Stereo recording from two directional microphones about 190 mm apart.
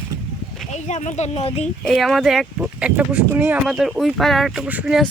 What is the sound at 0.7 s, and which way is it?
Speech, 35° left (ahead or behind).